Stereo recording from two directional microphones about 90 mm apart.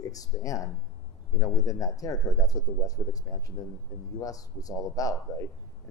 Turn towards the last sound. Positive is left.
turn(degrees=40)  # may be behind; listen again after turning